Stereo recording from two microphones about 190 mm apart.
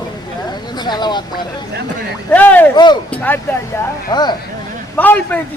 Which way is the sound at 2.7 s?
20° left (ahead or behind).